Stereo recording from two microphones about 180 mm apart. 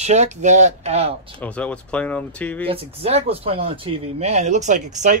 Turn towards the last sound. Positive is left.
turn(degrees=-40)  # may be behind; listen again after turning